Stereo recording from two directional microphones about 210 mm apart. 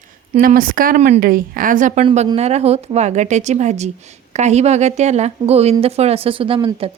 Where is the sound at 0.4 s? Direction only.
40° right (ahead or behind).